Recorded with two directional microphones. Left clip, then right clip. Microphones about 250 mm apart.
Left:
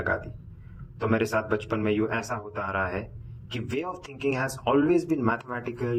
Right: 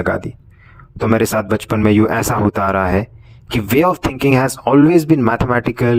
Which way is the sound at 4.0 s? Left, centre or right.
Right.